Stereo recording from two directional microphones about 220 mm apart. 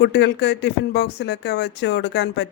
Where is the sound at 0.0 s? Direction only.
50° left (ahead or behind).